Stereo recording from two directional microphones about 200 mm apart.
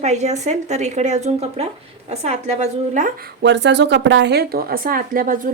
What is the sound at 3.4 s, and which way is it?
A woman's voice, 60° right (ahead or behind).